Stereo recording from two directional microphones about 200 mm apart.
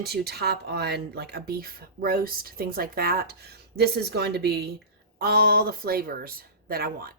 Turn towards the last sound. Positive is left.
turn(degrees=-50)  # may be behind; listen again after turning